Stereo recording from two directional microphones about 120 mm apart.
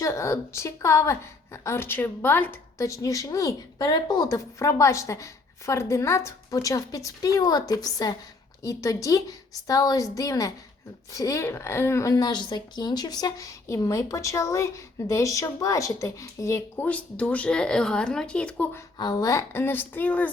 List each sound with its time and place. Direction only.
0.0 s a woman's voice: 25° left (ahead or behind)
18.9 s a woman's voice: 30° left (ahead or behind); by 20.3 s 10° left (ahead or behind)